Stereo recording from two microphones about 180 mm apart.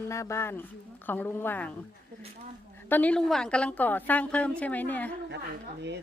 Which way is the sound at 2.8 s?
10° left (ahead or behind).